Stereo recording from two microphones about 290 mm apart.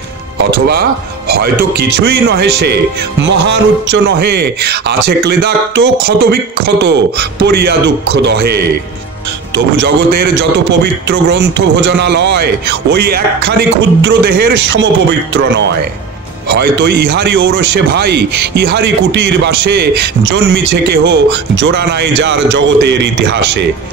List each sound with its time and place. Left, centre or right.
1.3 s a man's voice: right
9.8 s a man's voice: right